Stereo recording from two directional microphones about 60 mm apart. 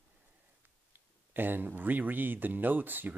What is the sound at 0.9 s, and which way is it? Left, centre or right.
Speech, right.